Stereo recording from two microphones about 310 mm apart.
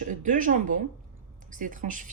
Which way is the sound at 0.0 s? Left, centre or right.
Right.